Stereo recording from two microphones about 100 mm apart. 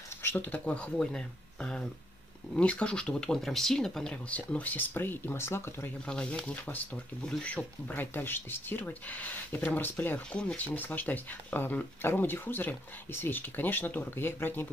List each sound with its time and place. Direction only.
0.2 s speech: 20° left (ahead or behind)
6.0 s speech: 10° left (ahead or behind)